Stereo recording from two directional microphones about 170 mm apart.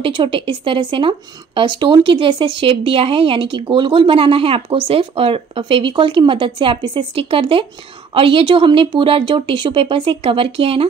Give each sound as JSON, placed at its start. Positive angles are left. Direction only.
{"t": 0.0, "sound": "speech", "side_deg": -30}